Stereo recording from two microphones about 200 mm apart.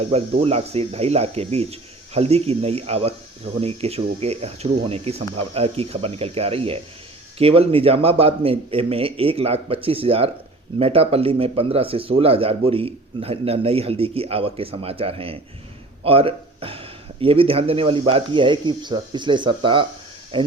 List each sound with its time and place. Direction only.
0.1 s speech: 30° right (ahead or behind)